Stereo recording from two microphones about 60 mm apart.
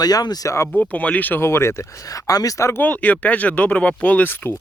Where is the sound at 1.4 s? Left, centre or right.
Left.